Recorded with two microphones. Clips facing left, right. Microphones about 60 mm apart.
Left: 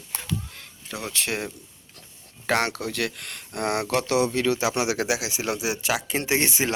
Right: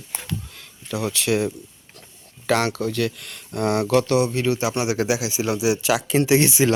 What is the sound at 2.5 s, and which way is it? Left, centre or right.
Speech, left.